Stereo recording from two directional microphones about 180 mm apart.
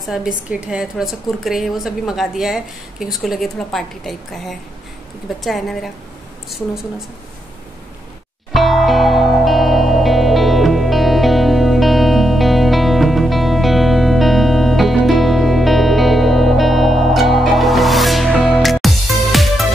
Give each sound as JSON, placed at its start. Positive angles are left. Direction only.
{"t": 0.0, "sound": "a woman's voice", "side_deg": 0}
{"t": 8.5, "sound": "music", "side_deg": 0}